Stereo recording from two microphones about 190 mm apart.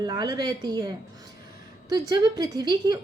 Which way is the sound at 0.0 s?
20° right (ahead or behind).